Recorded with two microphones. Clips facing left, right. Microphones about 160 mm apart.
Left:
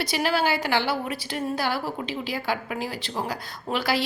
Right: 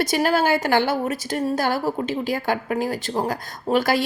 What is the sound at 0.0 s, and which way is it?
A woman's voice, 45° right (ahead or behind).